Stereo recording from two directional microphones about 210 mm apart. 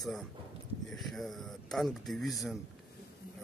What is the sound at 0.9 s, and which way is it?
Speech, centre (ahead or behind).